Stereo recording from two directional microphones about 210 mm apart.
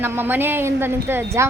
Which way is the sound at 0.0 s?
10° right (ahead or behind).